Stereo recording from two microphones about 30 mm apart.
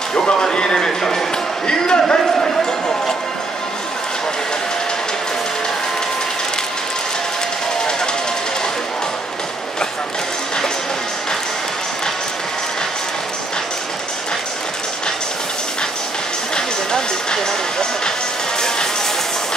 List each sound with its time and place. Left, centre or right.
0.2 s speech: left
1.7 s speech: left
2.3 s speech: centre
16.5 s music: left